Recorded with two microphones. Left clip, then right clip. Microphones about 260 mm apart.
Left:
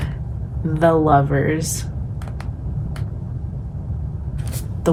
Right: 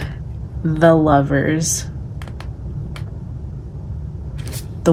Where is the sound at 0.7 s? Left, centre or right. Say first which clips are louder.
Right 2 dB; right.